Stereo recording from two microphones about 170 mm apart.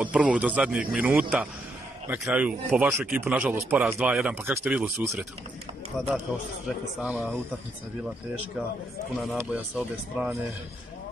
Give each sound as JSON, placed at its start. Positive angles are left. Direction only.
{"t": 0.0, "sound": "a man's voice", "side_deg": -5}
{"t": 9.4, "sound": "a man's voice", "side_deg": -10}